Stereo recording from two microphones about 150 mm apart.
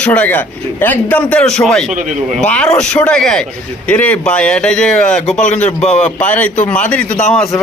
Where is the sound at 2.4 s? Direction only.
5° left (ahead or behind).